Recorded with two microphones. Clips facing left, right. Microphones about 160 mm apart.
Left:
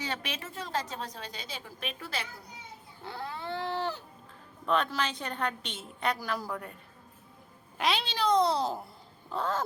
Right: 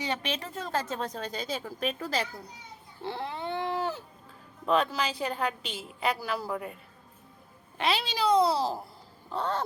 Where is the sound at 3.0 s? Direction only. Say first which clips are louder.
Right 4 dB; 25° right (ahead or behind); by 4.0 s 10° right (ahead or behind).